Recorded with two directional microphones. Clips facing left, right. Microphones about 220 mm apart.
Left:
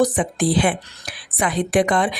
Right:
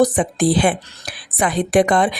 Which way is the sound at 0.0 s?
35° right (ahead or behind).